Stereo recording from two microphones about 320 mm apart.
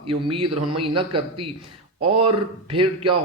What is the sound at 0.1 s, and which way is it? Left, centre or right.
A man's voice, centre.